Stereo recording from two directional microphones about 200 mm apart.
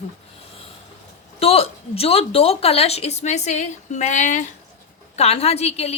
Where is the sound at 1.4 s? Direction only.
30° left (ahead or behind).